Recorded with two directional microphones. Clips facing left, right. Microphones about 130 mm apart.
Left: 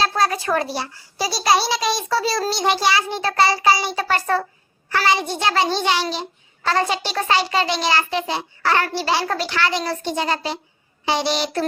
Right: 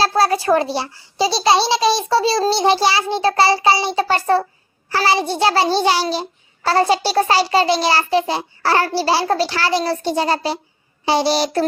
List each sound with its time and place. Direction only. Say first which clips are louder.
0.0 s a child's voice: right 4 dB; 30° right (ahead or behind)